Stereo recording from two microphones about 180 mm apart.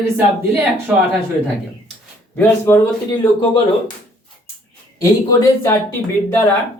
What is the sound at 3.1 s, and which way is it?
Speech, 30° left (ahead or behind).